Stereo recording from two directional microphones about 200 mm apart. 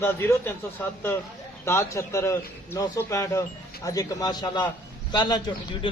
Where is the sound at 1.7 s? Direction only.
15° left (ahead or behind).